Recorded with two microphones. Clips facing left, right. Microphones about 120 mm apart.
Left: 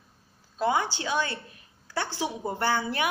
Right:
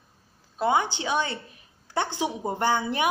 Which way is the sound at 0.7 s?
20° right (ahead or behind).